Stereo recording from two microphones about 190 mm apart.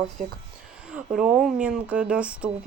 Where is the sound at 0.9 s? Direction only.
5° right (ahead or behind).